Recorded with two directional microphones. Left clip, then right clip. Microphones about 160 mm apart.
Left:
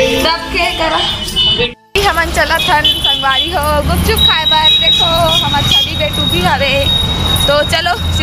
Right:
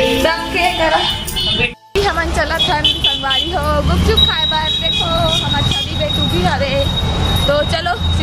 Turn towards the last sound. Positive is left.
turn(degrees=0)  # may be behind; listen again after turning